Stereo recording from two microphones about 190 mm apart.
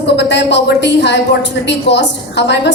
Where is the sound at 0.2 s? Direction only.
65° left (ahead or behind).